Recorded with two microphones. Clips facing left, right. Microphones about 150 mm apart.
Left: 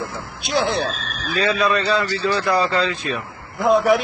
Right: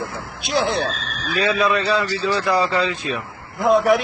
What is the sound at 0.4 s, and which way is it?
Speech, centre (ahead or behind).